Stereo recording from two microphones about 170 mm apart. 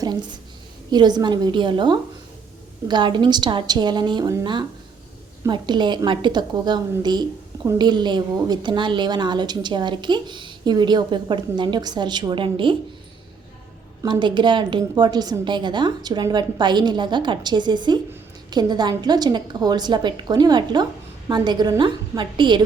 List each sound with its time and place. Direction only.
0.0 s a woman's voice: 25° right (ahead or behind)
14.0 s a woman's voice: 25° right (ahead or behind)